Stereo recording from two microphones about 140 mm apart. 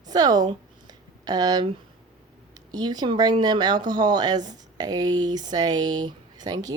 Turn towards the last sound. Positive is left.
turn(degrees=-30)  # may be behind; listen again after turning